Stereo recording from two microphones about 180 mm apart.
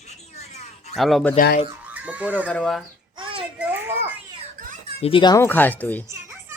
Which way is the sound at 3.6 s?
10° right (ahead or behind).